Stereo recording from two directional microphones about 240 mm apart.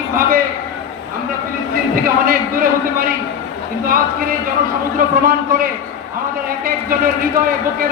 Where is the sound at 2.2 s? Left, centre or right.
Right.